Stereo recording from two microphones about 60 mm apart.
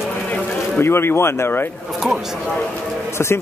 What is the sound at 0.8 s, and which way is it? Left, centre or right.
Speech, left.